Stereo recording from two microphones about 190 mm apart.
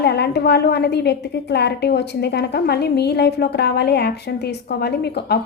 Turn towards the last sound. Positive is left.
turn(degrees=55)  # may be behind; listen again after turning